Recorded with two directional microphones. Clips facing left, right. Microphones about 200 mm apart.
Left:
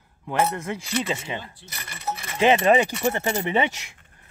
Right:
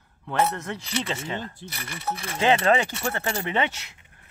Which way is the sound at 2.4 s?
15° left (ahead or behind).